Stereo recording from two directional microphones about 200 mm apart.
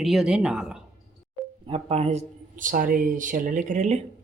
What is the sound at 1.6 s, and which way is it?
Speech, 30° right (ahead or behind).